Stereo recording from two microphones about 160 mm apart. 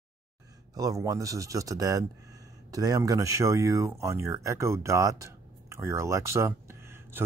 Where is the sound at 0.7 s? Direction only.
20° right (ahead or behind).